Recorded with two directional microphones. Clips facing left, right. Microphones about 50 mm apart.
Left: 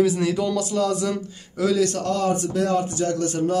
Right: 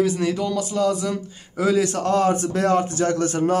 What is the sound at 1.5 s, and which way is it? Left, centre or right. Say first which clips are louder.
A man's voice: right 1 dB; centre.